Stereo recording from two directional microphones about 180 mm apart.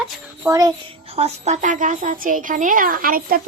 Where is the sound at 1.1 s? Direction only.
35° right (ahead or behind).